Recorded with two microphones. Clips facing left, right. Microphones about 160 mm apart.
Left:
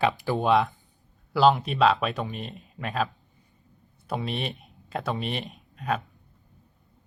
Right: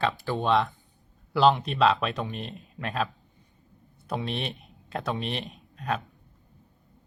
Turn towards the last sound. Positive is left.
turn(degrees=0)  # may be behind; listen again after turning